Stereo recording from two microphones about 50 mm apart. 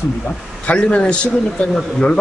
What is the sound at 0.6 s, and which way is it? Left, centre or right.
A man's voice, left.